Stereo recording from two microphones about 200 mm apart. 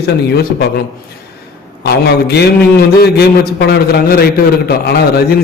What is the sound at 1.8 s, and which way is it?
Speech, 55° left (ahead or behind).